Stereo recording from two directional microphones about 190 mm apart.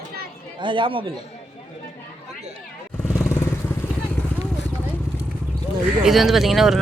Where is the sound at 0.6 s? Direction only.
25° right (ahead or behind).